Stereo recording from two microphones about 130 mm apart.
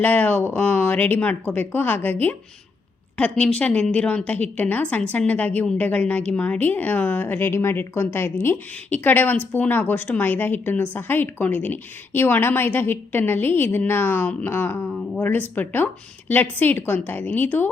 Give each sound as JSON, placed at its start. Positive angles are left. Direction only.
{"t": 0.0, "sound": "a woman's voice", "side_deg": 15}